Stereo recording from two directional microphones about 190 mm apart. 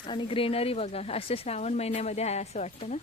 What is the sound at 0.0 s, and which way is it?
Speech, 25° left (ahead or behind).